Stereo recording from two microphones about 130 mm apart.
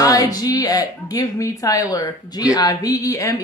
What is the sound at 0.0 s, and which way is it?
A woman's voice, 25° left (ahead or behind).